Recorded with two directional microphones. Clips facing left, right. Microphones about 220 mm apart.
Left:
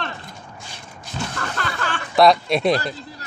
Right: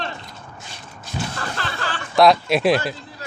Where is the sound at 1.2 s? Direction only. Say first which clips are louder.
Right 1 dB; 10° right (ahead or behind).